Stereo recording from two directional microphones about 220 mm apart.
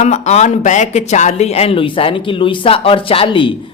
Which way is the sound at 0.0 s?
30° left (ahead or behind).